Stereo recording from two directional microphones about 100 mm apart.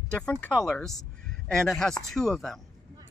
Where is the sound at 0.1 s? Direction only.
10° left (ahead or behind).